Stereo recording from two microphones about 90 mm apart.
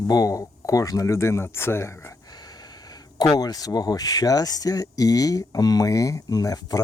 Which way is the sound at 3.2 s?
50° left (ahead or behind).